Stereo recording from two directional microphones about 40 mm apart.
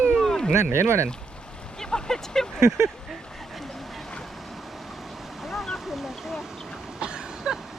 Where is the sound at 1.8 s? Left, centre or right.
Centre.